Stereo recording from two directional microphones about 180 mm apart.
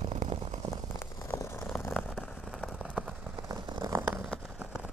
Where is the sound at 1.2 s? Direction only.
10° left (ahead or behind).